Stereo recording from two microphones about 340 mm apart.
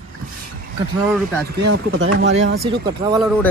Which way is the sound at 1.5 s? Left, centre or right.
Right.